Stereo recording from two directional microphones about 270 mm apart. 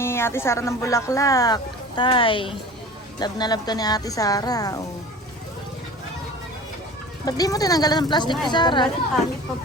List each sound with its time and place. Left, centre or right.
0.0 s speech: centre
7.3 s speech: centre